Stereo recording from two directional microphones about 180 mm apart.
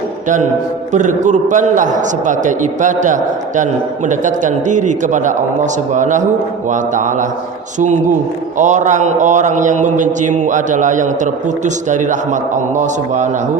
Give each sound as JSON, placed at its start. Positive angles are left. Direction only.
{"t": 0.9, "sound": "a man's voice", "side_deg": -45}
{"t": 8.5, "sound": "a man's voice", "side_deg": -45}